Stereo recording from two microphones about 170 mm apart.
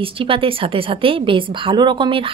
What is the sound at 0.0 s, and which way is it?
A woman's voice, 30° right (ahead or behind).